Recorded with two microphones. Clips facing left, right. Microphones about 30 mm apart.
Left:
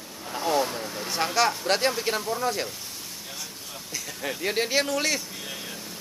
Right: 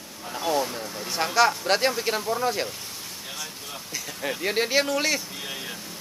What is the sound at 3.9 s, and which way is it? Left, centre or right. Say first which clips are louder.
A man's voice: right 1 dB; centre.